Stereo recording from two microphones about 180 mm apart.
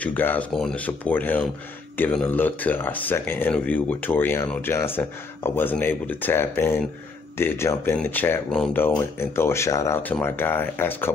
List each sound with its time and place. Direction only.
0.0 s speech: 10° left (ahead or behind)